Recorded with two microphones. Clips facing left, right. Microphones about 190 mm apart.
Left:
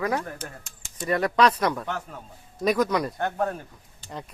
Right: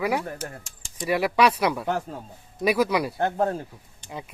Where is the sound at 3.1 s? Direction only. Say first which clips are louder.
Right 3 dB; 30° right (ahead or behind).